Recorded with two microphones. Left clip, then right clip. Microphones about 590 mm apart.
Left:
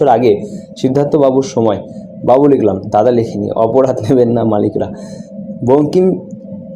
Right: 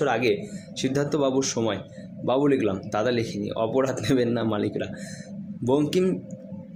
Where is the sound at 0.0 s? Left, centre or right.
Right.